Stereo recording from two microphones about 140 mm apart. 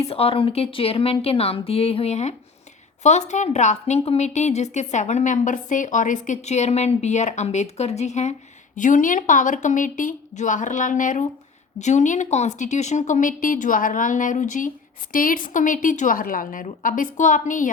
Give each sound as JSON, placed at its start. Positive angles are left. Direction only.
{"t": 0.0, "sound": "a woman's voice", "side_deg": 45}
{"t": 11.8, "sound": "a woman's voice", "side_deg": 55}
{"t": 15.1, "sound": "a woman's voice", "side_deg": 80}
{"t": 17.2, "sound": "a woman's voice", "side_deg": 65}